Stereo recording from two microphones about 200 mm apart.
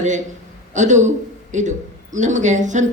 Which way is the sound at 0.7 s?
35° right (ahead or behind).